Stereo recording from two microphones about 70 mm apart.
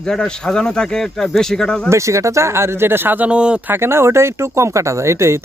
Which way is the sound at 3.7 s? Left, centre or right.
Right.